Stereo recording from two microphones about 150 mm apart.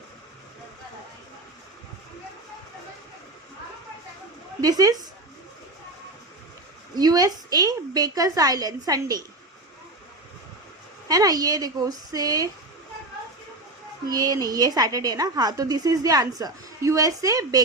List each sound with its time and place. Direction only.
4.6 s a woman's voice: 25° right (ahead or behind)
6.9 s a woman's voice: 25° right (ahead or behind)
11.1 s a woman's voice: 25° right (ahead or behind)
14.1 s a woman's voice: 25° right (ahead or behind)